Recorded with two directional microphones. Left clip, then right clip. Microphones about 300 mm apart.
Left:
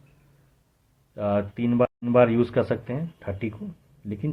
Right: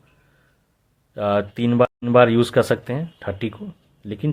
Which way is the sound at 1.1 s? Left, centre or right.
Right.